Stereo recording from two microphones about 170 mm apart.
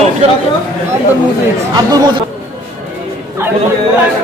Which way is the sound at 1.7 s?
25° right (ahead or behind).